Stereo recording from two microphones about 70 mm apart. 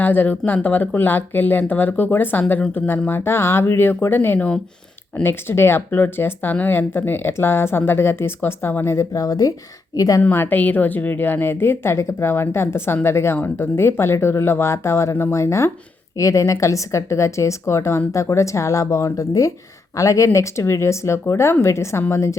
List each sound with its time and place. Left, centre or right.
0.0 s a woman's voice: left
10.3 s a woman's voice: left